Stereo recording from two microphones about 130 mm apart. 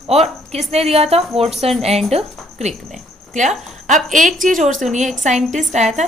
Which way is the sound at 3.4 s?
70° right (ahead or behind).